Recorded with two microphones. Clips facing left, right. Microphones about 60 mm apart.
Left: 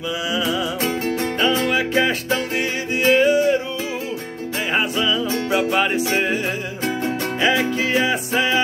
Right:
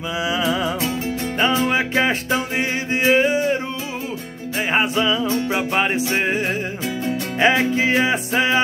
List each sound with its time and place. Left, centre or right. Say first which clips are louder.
0.3 s music: right 2 dB; right
4.7 s music: right 2 dB; right
7.3 s music: right 3 dB; right